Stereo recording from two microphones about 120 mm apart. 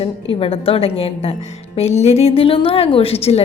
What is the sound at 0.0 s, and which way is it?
A woman's voice, 50° left (ahead or behind).